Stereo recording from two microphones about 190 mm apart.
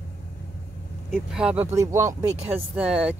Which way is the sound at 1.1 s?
5° right (ahead or behind).